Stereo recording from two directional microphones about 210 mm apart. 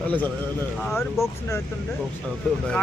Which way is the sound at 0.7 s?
5° left (ahead or behind).